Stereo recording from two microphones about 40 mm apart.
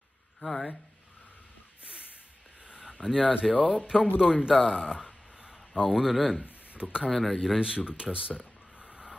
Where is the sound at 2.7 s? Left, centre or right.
Right.